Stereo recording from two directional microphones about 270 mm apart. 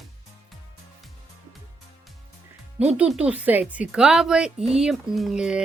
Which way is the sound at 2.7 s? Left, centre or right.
Centre.